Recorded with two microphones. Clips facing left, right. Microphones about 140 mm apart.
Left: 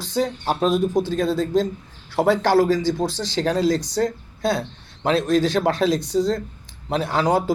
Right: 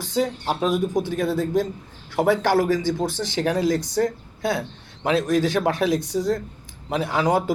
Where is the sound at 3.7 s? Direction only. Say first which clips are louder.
Even; 20° left (ahead or behind).